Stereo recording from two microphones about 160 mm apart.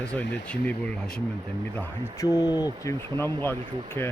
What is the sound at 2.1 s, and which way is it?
Speech, 25° left (ahead or behind).